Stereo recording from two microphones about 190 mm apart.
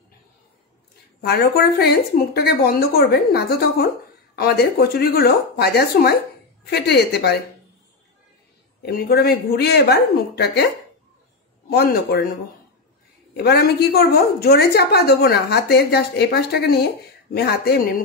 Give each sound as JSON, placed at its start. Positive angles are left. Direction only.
{"t": 1.2, "sound": "a woman's voice", "side_deg": 55}
{"t": 8.8, "sound": "a woman's voice", "side_deg": 55}
{"t": 11.7, "sound": "a woman's voice", "side_deg": 55}
{"t": 13.4, "sound": "a woman's voice", "side_deg": 55}